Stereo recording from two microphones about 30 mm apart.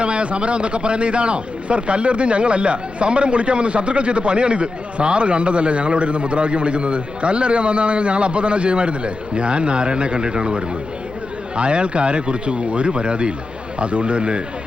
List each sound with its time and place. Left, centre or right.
0.0 s speech: right